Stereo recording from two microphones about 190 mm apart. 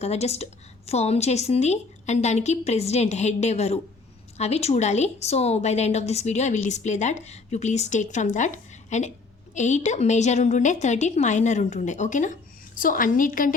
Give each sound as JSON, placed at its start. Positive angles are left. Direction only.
{"t": 0.0, "sound": "a woman's voice", "side_deg": 35}